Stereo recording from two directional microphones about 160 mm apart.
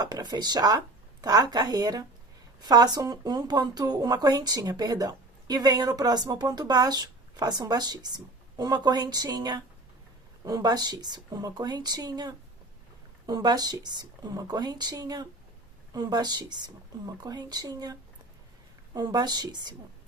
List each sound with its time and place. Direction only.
0.0 s speech: 25° right (ahead or behind)
18.9 s speech: 25° right (ahead or behind)